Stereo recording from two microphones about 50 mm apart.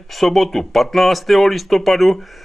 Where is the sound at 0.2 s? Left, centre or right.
Centre.